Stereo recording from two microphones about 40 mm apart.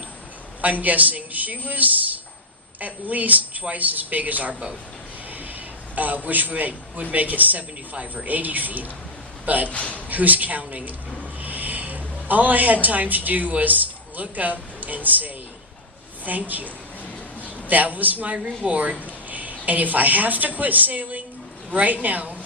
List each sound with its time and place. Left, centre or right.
0.6 s a man's voice: right
6.2 s a man's voice: right
9.6 s a man's voice: left
10.1 s a man's voice: right